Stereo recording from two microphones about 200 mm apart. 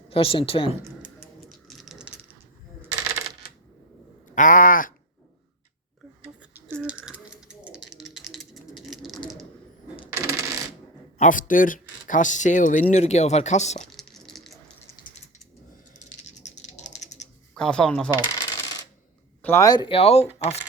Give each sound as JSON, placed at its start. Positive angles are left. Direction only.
{"t": 0.1, "sound": "speech", "side_deg": 25}
{"t": 0.8, "sound": "tick-tock", "side_deg": -15}
{"t": 1.5, "sound": "a sound", "side_deg": 0}
{"t": 4.4, "sound": "speech", "side_deg": 40}
{"t": 6.7, "sound": "a sound", "side_deg": -5}
{"t": 10.1, "sound": "coin", "side_deg": -15}
{"t": 11.2, "sound": "speech", "side_deg": 40}
{"t": 13.8, "sound": "a sound", "side_deg": 0}
{"t": 16.6, "sound": "a sound", "side_deg": 35}
{"t": 17.5, "sound": "speech", "side_deg": 5}
{"t": 18.2, "sound": "coin", "side_deg": 20}
{"t": 19.4, "sound": "speech", "side_deg": 10}